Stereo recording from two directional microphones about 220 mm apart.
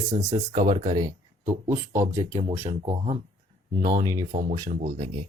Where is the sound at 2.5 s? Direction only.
30° right (ahead or behind).